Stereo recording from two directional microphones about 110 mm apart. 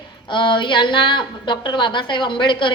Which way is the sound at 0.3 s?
50° left (ahead or behind).